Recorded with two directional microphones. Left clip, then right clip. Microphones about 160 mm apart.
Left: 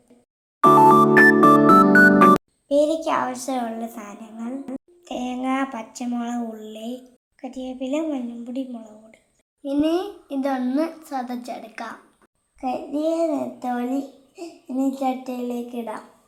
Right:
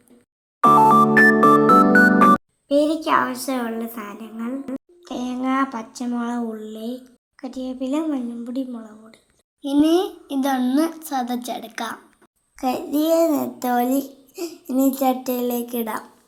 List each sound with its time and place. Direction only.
0.6 s music: centre (ahead or behind)
2.6 s a woman's voice: 15° right (ahead or behind)
12.5 s a child's voice: 40° right (ahead or behind)